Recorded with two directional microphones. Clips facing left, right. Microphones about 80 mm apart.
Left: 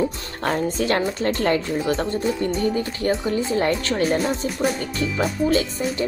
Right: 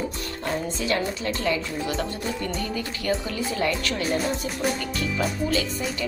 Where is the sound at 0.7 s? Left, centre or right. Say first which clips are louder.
Left 4 dB; left.